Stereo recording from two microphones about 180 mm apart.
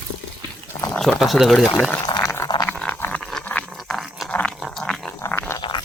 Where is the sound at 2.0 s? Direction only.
20° left (ahead or behind); by 5.1 s centre (ahead or behind).